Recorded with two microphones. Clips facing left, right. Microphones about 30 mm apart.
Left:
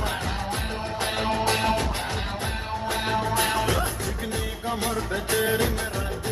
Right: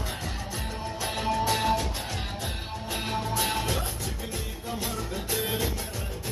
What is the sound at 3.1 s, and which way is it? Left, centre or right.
Music, left.